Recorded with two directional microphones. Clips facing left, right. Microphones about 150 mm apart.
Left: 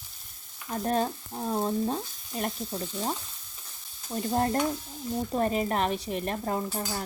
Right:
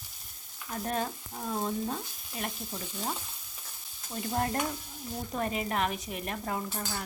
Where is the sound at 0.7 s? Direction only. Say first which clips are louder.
Left 5 dB; 35° left (ahead or behind).